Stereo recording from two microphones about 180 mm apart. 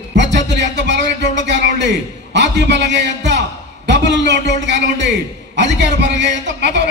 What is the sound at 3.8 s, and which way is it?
A man's voice, 75° right (ahead or behind).